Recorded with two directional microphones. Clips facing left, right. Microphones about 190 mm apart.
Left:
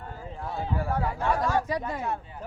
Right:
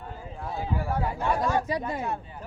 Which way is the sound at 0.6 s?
10° right (ahead or behind).